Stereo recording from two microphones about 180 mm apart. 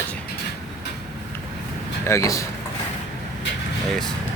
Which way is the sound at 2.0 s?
15° left (ahead or behind).